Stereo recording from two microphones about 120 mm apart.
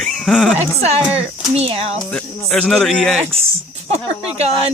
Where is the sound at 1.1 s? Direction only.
55° right (ahead or behind).